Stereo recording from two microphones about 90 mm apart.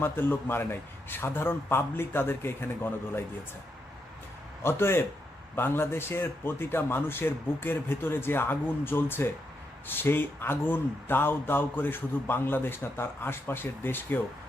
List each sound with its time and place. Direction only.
0.0 s speech: 25° left (ahead or behind)
4.6 s speech: 25° left (ahead or behind)